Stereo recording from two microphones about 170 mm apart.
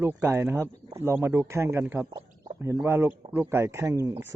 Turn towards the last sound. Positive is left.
turn(degrees=-15)  # may be behind; listen again after turning